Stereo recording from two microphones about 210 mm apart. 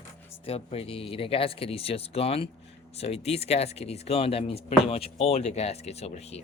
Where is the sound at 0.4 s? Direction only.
30° left (ahead or behind).